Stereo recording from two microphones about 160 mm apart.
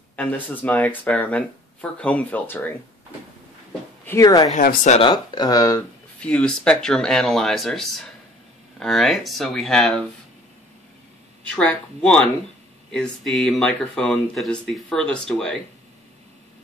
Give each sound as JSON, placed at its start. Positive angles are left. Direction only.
{"t": 0.1, "sound": "speech", "side_deg": 10}
{"t": 4.2, "sound": "speech", "side_deg": 20}
{"t": 4.6, "sound": "speech", "side_deg": 50}
{"t": 5.0, "sound": "speech", "side_deg": 25}
{"t": 6.2, "sound": "speech", "side_deg": 5}
{"t": 11.5, "sound": "speech", "side_deg": 5}